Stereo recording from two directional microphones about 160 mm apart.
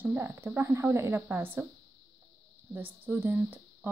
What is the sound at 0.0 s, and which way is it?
Speech, 15° right (ahead or behind).